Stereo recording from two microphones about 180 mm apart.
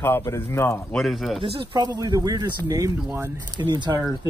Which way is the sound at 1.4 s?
30° right (ahead or behind).